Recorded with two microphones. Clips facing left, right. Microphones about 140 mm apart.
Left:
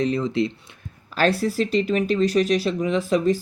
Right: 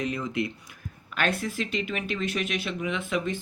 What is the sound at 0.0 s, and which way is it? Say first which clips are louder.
Speech: left 7 dB; 30° left (ahead or behind).